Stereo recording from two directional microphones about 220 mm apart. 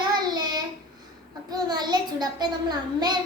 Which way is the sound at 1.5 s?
20° right (ahead or behind).